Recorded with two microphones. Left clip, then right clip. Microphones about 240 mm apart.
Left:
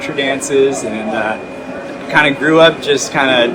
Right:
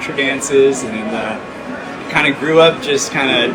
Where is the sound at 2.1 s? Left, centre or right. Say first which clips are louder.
Left 3 dB; centre.